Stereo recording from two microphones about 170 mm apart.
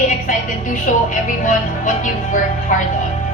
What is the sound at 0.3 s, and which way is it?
A woman's voice, 50° left (ahead or behind).